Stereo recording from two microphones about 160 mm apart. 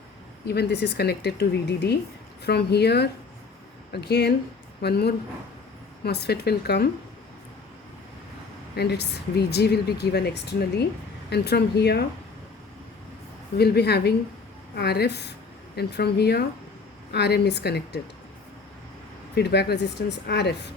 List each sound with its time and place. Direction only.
0.4 s speech: 90° left
8.7 s speech: 90° left
13.6 s speech: 90° left
19.4 s speech: 90° left